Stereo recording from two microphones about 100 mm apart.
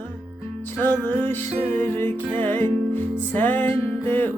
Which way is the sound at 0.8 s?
20° left (ahead or behind).